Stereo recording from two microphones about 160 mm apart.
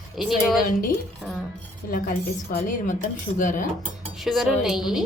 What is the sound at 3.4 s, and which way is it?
Dishes, 55° left (ahead or behind).